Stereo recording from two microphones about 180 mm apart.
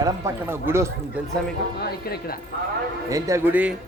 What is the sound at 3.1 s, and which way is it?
Speech, 15° right (ahead or behind).